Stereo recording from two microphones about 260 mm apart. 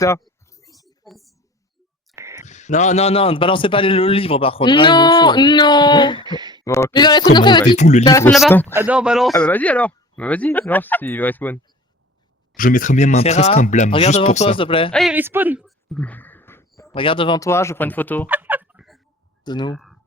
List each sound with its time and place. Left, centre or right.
0.5 s a sound: centre
1.0 s a sound: centre
2.1 s clicking: centre
2.4 s a man's voice: left
6.2 s a sound: centre
6.7 s speech: centre; by 8.0 s left
8.0 s speech: centre
8.3 s speech: centre
12.5 s a man's voice: left
14.9 s speech: centre
18.3 s fowl: centre
19.5 s speech: centre